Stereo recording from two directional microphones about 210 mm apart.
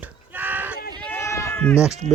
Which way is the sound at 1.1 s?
15° left (ahead or behind).